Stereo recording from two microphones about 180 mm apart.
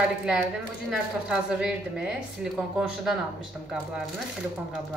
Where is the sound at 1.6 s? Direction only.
5° right (ahead or behind).